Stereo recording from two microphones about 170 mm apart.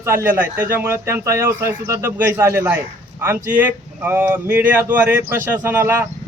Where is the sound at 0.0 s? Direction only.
15° right (ahead or behind).